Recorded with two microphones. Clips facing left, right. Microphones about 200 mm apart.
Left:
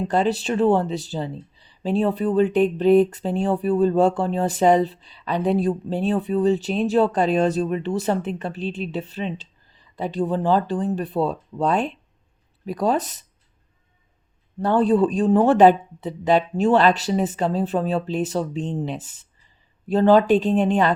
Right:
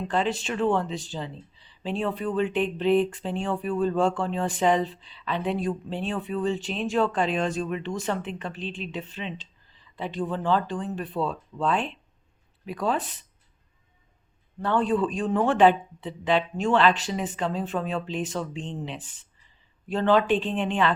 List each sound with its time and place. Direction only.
0.1 s speech: 40° left (ahead or behind)
14.6 s speech: 35° left (ahead or behind)